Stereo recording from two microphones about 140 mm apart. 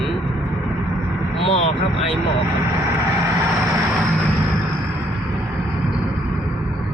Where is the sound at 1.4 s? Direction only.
45° left (ahead or behind).